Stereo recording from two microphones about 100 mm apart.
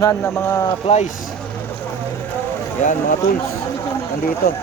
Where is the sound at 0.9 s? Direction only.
90° left.